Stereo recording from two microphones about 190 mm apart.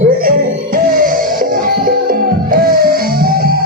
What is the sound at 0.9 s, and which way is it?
Music, 45° right (ahead or behind).